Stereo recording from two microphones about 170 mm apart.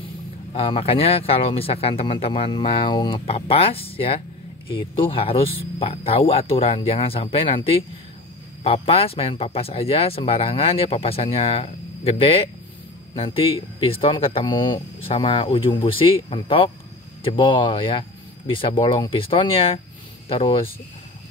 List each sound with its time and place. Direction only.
0.6 s speech: 35° left (ahead or behind)